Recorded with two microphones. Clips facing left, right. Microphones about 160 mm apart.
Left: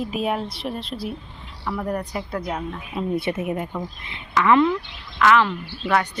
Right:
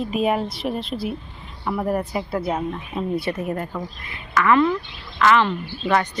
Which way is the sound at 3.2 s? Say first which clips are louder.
Even; 20° left (ahead or behind).